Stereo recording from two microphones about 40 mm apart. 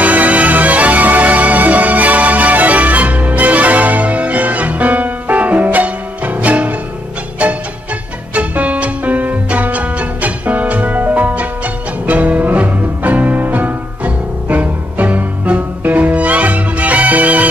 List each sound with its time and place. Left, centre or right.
0.0 s music: right
8.4 s music: right